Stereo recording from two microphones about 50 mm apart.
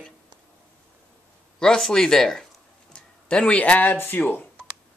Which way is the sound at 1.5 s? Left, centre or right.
Centre.